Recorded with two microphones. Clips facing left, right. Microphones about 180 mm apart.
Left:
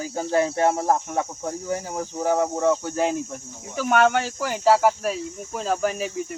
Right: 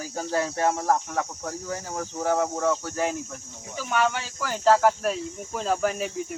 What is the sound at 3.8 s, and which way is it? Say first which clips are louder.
Speech: left 6 dB; 60° left (ahead or behind).